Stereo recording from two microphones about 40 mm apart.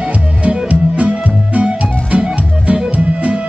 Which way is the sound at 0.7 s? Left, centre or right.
Right.